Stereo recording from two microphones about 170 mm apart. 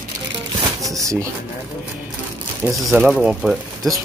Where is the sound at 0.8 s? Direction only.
20° right (ahead or behind).